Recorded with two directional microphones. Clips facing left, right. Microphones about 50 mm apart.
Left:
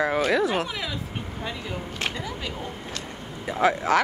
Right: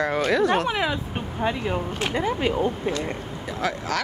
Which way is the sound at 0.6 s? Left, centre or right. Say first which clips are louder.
Right 7 dB; right.